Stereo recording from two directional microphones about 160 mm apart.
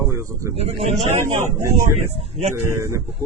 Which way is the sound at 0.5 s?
40° right (ahead or behind).